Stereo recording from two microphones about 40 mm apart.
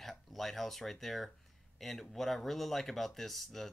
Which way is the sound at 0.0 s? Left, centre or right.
Centre.